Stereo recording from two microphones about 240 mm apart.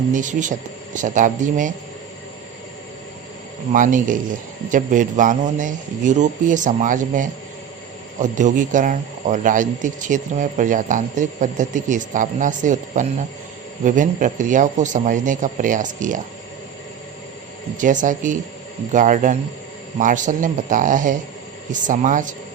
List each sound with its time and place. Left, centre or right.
0.1 s speech: right
3.7 s speech: right
17.7 s speech: right